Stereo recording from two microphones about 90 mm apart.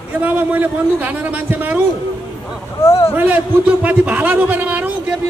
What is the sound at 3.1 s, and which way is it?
A man's voice, 15° right (ahead or behind).